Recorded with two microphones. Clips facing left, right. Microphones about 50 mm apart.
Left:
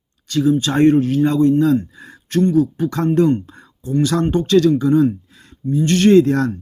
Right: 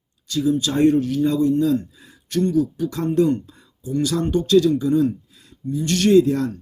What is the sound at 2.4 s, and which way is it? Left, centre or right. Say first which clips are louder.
Speech: left 4 dB; left.